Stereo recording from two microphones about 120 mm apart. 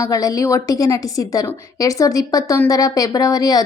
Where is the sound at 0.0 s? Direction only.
30° left (ahead or behind).